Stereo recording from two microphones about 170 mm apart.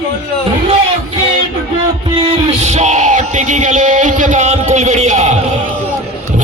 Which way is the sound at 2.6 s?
45° right (ahead or behind).